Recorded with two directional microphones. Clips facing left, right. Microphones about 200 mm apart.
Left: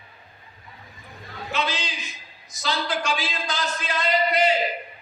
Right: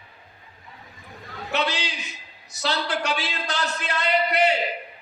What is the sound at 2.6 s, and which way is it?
A man's voice, 65° right (ahead or behind).